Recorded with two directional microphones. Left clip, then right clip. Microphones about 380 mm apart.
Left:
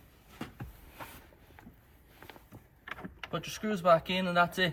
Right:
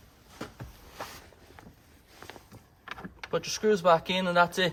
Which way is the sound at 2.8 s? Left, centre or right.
Centre.